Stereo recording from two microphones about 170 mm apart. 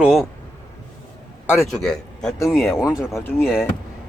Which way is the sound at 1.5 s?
Centre (ahead or behind).